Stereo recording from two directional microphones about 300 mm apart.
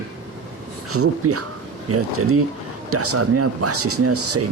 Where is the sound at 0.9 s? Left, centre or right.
Right.